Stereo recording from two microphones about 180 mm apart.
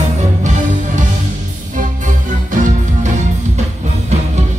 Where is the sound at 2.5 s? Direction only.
45° right (ahead or behind).